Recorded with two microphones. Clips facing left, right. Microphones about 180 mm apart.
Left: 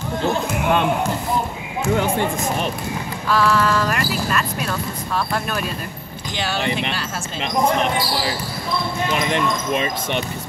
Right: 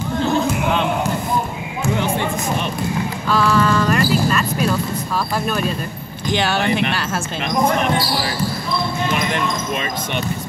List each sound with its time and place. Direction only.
2.0 s music: 45° left (ahead or behind)
3.3 s a sound: centre (ahead or behind)
6.3 s speech: 65° right (ahead or behind)
9.3 s speech: 30° left (ahead or behind)